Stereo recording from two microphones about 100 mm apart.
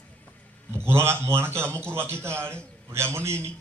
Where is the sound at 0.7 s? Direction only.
25° right (ahead or behind).